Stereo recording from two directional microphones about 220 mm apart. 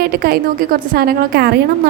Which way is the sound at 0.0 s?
45° right (ahead or behind).